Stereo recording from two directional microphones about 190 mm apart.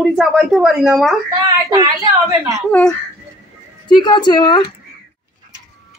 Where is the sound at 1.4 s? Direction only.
20° right (ahead or behind).